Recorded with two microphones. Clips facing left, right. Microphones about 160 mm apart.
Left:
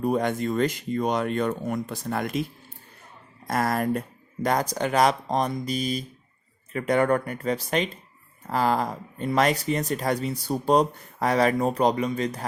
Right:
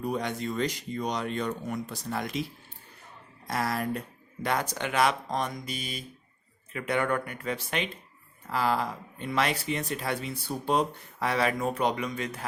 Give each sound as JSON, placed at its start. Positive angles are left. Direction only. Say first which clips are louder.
{"t": 0.0, "sound": "speech", "louder": "left 7 dB", "side_deg": 50}
{"t": 4.4, "sound": "speech", "louder": "left 5 dB", "side_deg": 40}